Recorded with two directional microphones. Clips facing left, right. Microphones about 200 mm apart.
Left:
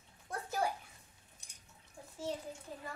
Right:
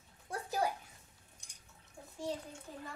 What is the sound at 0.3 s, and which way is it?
Bathtub, 15° right (ahead or behind).